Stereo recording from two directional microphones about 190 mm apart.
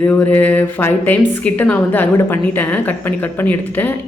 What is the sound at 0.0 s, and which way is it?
Speech, 10° left (ahead or behind).